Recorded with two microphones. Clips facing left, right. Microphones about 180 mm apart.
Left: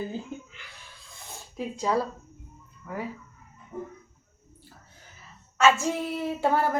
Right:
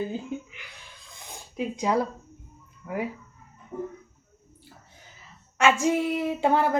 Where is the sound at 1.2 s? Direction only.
15° right (ahead or behind).